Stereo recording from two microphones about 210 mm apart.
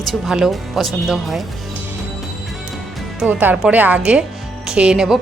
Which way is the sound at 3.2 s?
10° right (ahead or behind).